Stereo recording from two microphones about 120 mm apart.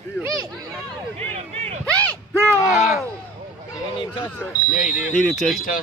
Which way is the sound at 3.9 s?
40° left (ahead or behind).